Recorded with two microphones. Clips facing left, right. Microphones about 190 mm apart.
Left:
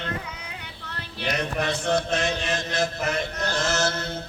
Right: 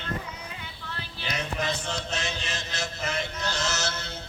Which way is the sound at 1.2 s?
65° left (ahead or behind).